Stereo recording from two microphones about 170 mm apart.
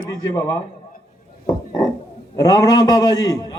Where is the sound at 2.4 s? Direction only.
20° left (ahead or behind).